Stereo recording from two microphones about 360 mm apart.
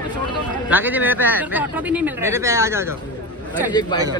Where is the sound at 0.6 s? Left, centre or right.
Centre.